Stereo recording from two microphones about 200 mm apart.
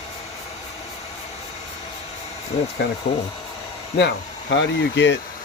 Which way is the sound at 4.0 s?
60° left (ahead or behind).